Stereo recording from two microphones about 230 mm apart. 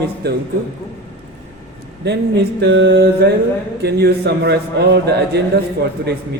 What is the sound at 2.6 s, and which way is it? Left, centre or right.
A man's voice, right.